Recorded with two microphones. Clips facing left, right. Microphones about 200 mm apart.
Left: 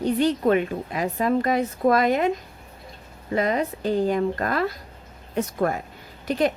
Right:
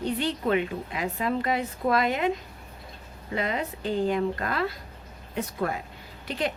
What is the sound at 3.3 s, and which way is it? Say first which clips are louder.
Speech: left 6 dB; 45° left (ahead or behind).